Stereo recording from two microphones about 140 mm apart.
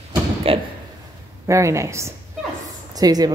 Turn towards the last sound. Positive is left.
turn(degrees=-25)  # may be behind; listen again after turning